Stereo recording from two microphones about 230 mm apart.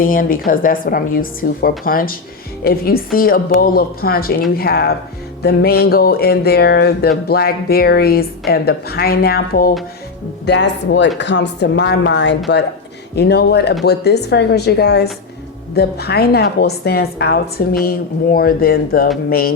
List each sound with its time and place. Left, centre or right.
0.0 s a woman's voice: left